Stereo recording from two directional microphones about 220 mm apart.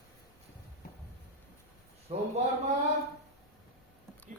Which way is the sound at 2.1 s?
25° right (ahead or behind).